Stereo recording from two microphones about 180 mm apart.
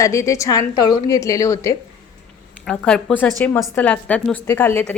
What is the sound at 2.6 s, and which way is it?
A woman's voice, 5° left (ahead or behind).